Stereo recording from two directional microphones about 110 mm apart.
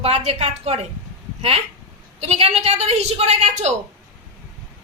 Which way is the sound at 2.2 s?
65° right (ahead or behind).